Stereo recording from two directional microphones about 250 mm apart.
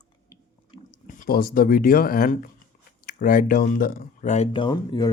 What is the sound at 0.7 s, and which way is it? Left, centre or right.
Speech, left.